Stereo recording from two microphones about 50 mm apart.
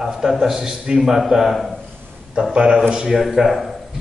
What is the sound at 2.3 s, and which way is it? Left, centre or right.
A man's voice, centre.